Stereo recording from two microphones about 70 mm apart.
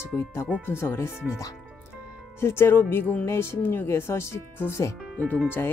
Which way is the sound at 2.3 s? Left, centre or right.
Left.